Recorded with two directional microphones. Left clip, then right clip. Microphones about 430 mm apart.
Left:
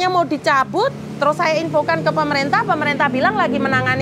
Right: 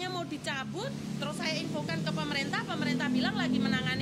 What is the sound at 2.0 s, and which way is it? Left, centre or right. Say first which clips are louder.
A woman's voice: left 16 dB; left.